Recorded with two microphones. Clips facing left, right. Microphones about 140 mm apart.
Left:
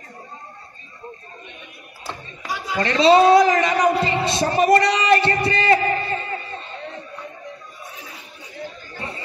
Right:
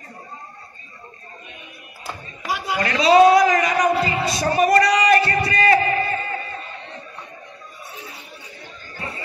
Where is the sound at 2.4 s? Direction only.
75° right (ahead or behind).